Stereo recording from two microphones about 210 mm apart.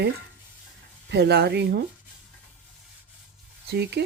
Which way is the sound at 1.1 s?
55° right (ahead or behind).